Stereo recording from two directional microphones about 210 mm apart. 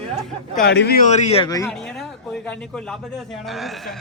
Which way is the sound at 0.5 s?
55° left (ahead or behind).